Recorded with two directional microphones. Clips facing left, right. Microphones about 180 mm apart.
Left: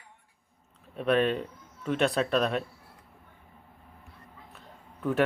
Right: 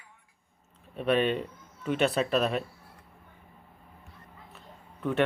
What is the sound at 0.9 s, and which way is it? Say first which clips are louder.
Speech: left 1 dB; centre (ahead or behind).